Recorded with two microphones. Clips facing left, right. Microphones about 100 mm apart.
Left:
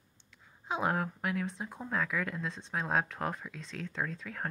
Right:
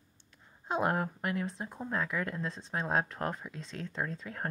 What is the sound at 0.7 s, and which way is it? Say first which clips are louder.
Speech: right 1 dB; centre (ahead or behind).